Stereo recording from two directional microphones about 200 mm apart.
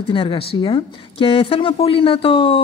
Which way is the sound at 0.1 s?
25° left (ahead or behind).